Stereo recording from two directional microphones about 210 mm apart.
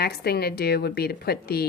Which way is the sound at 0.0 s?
50° left (ahead or behind).